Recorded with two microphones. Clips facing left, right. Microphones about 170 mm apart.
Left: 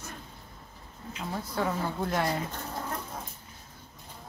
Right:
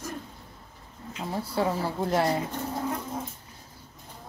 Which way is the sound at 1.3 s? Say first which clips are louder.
Right 4 dB; 30° right (ahead or behind).